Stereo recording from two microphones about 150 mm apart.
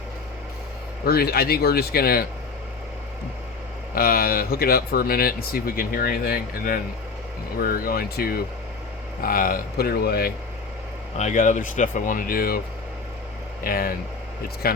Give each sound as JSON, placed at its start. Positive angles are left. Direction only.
{"t": 1.0, "sound": "speech", "side_deg": 90}
{"t": 3.9, "sound": "speech", "side_deg": 80}
{"t": 9.2, "sound": "speech", "side_deg": 75}
{"t": 11.2, "sound": "speech", "side_deg": 55}
{"t": 13.7, "sound": "speech", "side_deg": 75}